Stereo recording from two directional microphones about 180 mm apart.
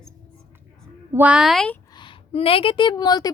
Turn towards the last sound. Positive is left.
turn(degrees=20)  # may be behind; listen again after turning